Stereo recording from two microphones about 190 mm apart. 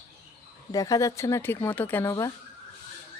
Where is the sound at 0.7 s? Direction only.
20° left (ahead or behind).